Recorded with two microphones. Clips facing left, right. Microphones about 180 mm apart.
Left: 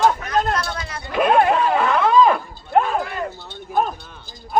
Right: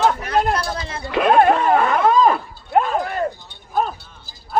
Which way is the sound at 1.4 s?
45° right (ahead or behind).